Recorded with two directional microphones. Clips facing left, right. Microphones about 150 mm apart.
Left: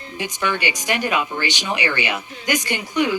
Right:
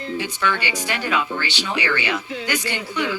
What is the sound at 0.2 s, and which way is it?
Speech, 15° left (ahead or behind).